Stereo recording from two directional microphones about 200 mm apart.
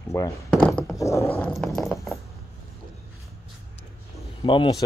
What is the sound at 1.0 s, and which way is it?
Dog, 15° left (ahead or behind).